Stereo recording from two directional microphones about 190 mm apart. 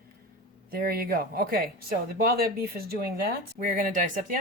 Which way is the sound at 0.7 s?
50° right (ahead or behind).